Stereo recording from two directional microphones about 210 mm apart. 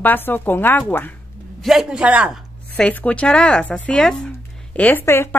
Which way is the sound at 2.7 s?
5° left (ahead or behind).